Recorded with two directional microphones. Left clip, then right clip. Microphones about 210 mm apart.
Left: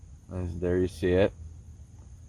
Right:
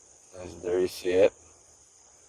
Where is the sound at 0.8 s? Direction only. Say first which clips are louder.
Right 5 dB; 15° right (ahead or behind).